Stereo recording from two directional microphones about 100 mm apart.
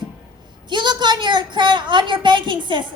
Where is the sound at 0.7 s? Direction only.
50° right (ahead or behind).